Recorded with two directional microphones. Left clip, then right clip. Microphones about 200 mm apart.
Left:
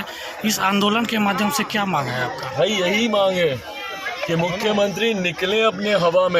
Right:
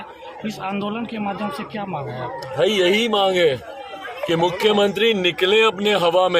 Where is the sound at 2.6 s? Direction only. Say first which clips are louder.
Right 2 dB; 40° right (ahead or behind).